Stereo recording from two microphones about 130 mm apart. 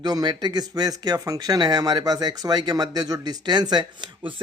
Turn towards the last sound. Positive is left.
turn(degrees=-40)  # may be behind; listen again after turning